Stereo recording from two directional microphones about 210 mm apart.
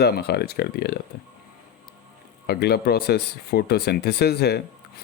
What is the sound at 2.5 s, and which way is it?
Speech, 50° left (ahead or behind).